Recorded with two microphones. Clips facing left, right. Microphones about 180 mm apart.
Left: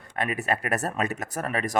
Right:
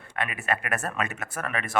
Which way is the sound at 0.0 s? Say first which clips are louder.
Left 4 dB; 40° left (ahead or behind).